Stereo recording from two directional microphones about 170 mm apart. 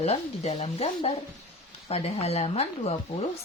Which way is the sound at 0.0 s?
40° left (ahead or behind).